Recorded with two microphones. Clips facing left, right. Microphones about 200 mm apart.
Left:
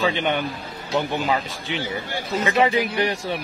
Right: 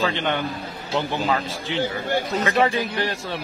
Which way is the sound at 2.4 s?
15° left (ahead or behind).